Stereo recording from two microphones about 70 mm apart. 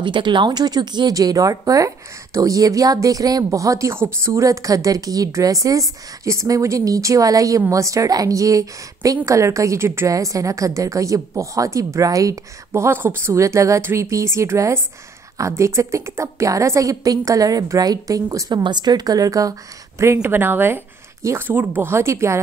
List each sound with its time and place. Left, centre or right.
0.0 s speech: right
3.4 s a woman's voice: right
18.5 s a woman's voice: right
20.2 s speech: right
21.2 s speech: right
21.5 s speech: right